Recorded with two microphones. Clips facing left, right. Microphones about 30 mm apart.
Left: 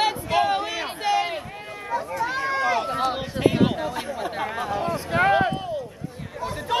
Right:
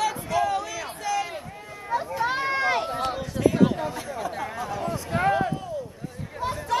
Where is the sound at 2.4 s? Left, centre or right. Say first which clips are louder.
Left 1 dB; centre.